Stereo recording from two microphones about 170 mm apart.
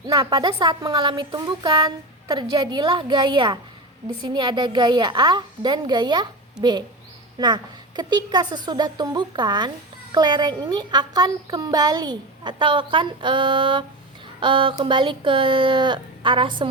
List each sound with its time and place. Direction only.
0.1 s a woman's voice: 25° right (ahead or behind)